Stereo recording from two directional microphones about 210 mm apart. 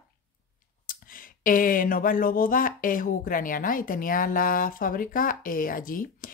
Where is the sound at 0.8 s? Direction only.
40° left (ahead or behind).